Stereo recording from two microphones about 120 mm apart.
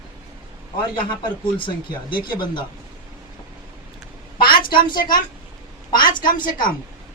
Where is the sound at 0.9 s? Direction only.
45° left (ahead or behind).